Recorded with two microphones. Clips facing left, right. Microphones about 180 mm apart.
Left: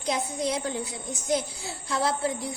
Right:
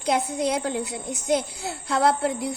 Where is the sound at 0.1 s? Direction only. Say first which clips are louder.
Right 4 dB; 60° right (ahead or behind).